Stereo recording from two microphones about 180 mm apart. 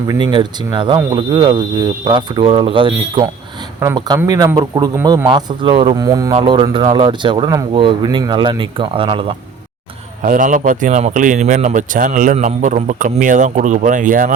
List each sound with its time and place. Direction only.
0.1 s speech: 25° right (ahead or behind)
10.2 s a man's voice: 45° right (ahead or behind)